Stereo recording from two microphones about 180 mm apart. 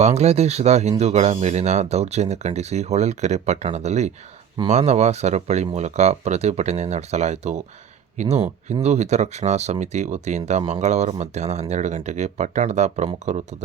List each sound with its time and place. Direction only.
0.0 s speech: 35° right (ahead or behind)